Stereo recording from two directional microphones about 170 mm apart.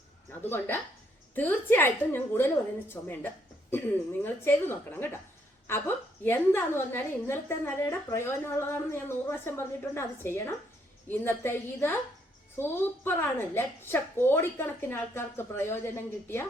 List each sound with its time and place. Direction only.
0.4 s a woman's voice: 10° left (ahead or behind)
6.2 s a woman's voice: 15° left (ahead or behind)